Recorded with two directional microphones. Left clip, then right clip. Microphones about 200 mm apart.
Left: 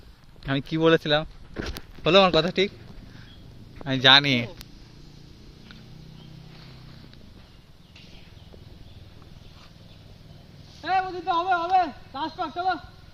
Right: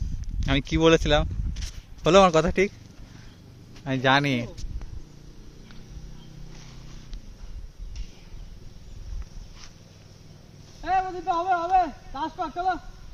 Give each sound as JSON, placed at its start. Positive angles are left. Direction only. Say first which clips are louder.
{"t": 0.3, "sound": "speech", "louder": "right 2 dB", "side_deg": -20}
{"t": 3.8, "sound": "speech", "louder": "left 5 dB", "side_deg": -5}
{"t": 10.8, "sound": "a sound", "louder": "even", "side_deg": -30}